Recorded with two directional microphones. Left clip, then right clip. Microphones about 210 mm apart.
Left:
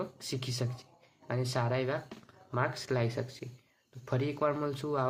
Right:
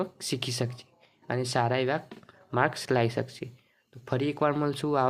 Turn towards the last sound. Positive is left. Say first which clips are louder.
# right 6 dB
turn(degrees=-40)  # may be behind; listen again after turning